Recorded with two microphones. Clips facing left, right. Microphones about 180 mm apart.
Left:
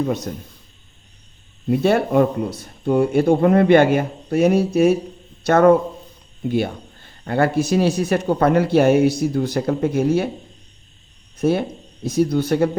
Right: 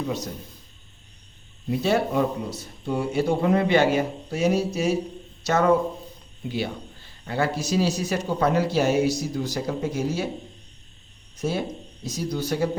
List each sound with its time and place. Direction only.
0.0 s a man's voice: 55° left (ahead or behind)
1.6 s a man's voice: 55° left (ahead or behind)
11.3 s a man's voice: 55° left (ahead or behind)